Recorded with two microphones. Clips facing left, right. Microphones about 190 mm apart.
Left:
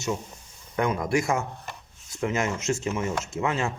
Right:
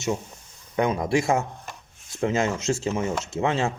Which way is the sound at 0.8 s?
25° right (ahead or behind).